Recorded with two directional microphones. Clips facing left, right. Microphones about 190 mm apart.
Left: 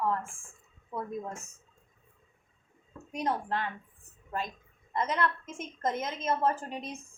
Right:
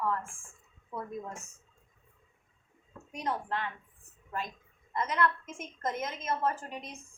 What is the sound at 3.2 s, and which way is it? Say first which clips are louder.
Speech: left 2 dB; 35° left (ahead or behind).